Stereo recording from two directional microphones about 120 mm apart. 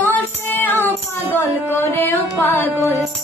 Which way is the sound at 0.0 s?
15° left (ahead or behind).